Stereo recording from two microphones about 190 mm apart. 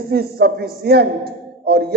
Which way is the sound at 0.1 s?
55° right (ahead or behind).